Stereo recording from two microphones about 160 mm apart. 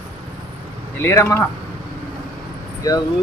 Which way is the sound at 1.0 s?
15° left (ahead or behind).